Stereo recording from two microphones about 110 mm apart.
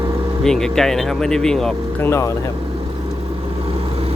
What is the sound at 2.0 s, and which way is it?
Speech, 25° left (ahead or behind).